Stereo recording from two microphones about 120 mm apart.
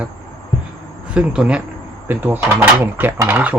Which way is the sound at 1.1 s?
10° right (ahead or behind).